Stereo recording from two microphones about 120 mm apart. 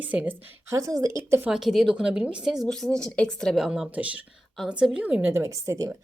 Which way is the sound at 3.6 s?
5° right (ahead or behind).